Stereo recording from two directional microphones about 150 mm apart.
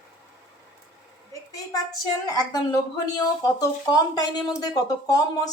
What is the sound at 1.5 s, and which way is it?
A woman's voice, 25° left (ahead or behind).